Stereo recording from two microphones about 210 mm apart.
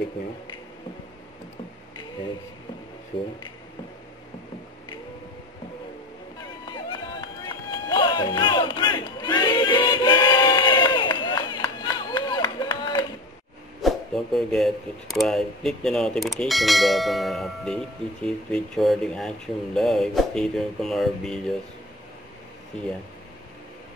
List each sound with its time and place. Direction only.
6.7 s run: 20° left (ahead or behind)
13.8 s speech: centre (ahead or behind)